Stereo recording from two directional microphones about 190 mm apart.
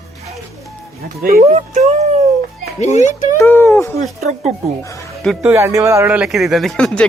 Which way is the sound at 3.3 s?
15° left (ahead or behind).